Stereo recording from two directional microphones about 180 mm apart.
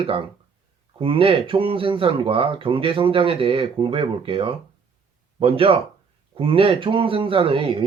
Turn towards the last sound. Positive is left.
turn(degrees=-30)  # may be behind; listen again after turning